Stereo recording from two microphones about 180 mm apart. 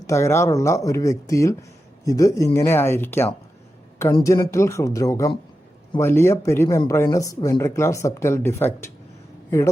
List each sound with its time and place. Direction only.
0.1 s speech: 15° left (ahead or behind)